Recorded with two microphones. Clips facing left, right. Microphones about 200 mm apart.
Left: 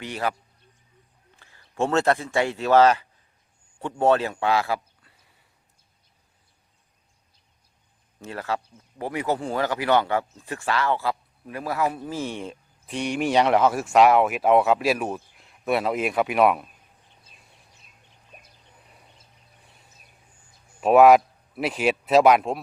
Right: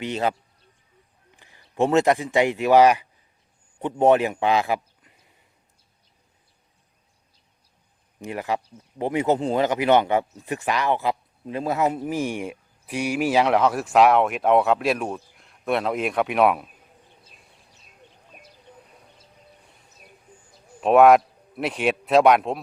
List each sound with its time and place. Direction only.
0.0 s speech: 20° right (ahead or behind)
1.4 s a man's voice: 15° right (ahead or behind)
8.2 s speech: 15° right (ahead or behind); by 16.6 s centre (ahead or behind)
20.8 s a man's voice: centre (ahead or behind)